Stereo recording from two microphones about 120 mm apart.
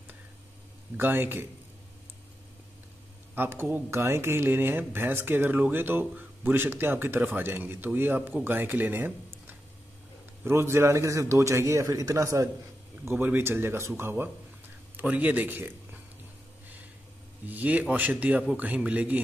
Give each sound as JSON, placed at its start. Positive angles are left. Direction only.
{"t": 0.9, "sound": "speech", "side_deg": -20}
{"t": 3.3, "sound": "a man's voice", "side_deg": -20}
{"t": 17.5, "sound": "speech", "side_deg": -15}